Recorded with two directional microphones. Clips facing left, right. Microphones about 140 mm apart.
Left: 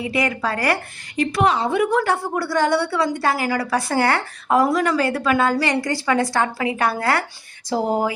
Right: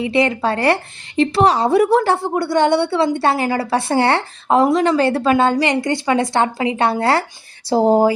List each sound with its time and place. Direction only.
0.0 s a woman's voice: 25° right (ahead or behind)